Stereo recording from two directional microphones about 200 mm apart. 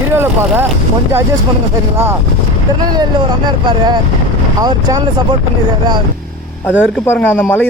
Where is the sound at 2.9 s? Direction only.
20° right (ahead or behind).